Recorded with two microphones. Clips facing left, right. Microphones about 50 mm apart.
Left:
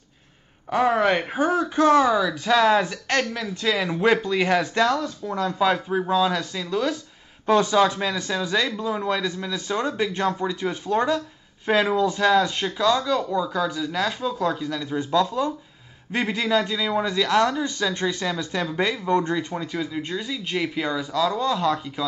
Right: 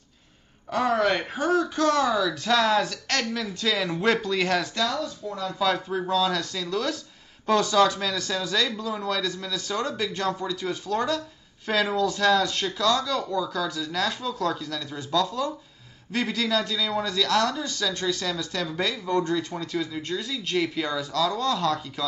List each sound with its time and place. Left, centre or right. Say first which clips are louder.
0.7 s speech: left 3 dB; centre
4.7 s speech: left 6 dB; left
5.6 s speech: left 2 dB; left